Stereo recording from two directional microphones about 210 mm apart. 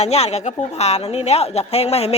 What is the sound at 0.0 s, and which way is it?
Speech, 30° left (ahead or behind).